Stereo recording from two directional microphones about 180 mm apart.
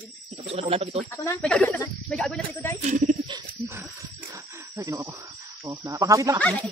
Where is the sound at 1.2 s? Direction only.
5° left (ahead or behind).